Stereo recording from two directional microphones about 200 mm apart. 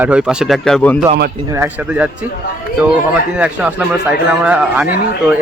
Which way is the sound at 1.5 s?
10° right (ahead or behind).